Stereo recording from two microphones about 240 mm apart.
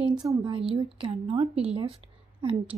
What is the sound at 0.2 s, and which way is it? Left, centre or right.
A woman's voice, centre.